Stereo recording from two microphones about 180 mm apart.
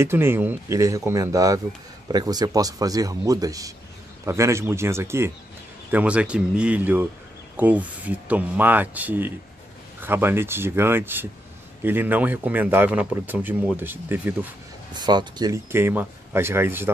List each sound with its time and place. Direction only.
0.0 s a man's voice: 15° right (ahead or behind)
15.0 s speech: 25° right (ahead or behind)